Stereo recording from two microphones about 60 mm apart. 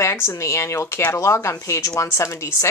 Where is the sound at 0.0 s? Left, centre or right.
Left.